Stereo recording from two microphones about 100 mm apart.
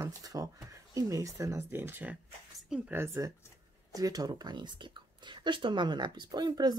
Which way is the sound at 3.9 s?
35° right (ahead or behind).